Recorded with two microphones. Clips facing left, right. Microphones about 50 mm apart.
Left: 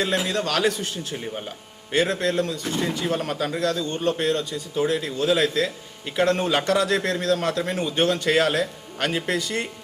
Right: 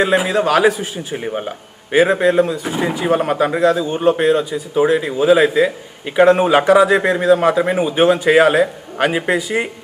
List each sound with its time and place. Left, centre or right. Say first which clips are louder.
0.0 s speech: right 9 dB; centre
1.1 s speech: right 9 dB; right